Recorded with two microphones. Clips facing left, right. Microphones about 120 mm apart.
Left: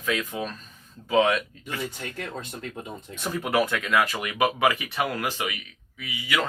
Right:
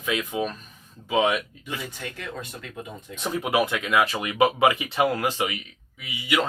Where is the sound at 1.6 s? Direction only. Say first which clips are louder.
Left 1 dB; 35° left (ahead or behind).